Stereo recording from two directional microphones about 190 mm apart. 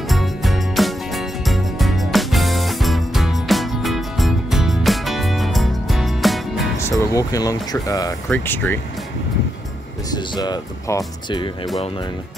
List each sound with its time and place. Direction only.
0.1 s music: centre (ahead or behind)
6.8 s speech: 15° left (ahead or behind)
10.1 s speech: 20° left (ahead or behind)